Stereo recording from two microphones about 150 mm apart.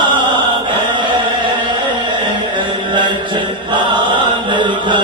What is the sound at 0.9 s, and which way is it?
Chant, 30° right (ahead or behind).